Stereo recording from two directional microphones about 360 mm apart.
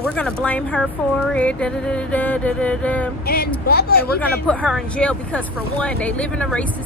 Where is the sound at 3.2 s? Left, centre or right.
Left.